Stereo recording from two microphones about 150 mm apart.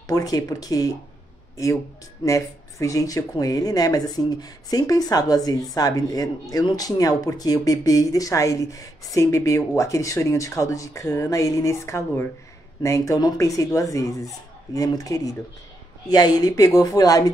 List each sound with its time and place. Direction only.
0.0 s speech: 25° left (ahead or behind)
2.2 s speech: 20° left (ahead or behind)